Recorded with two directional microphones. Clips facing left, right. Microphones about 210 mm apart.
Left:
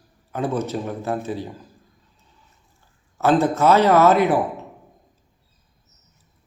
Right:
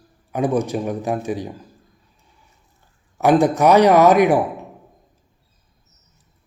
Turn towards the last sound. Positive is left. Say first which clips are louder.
# right 3 dB
turn(degrees=-15)  # may be behind; listen again after turning